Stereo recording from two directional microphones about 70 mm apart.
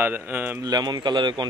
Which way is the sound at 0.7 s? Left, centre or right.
Right.